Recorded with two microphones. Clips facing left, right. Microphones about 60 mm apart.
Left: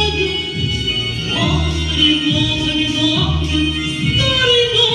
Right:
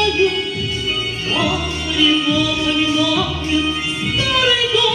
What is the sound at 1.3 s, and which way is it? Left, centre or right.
Music, right.